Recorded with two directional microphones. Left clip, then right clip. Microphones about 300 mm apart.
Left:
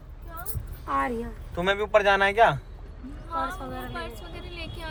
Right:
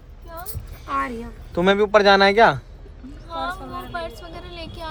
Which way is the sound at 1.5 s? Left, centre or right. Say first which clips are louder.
Right 6 dB; right.